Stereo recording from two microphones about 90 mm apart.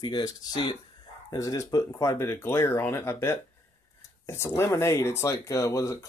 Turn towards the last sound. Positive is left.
turn(degrees=35)  # may be behind; listen again after turning